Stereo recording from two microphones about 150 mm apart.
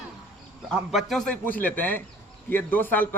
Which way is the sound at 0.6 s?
Centre (ahead or behind).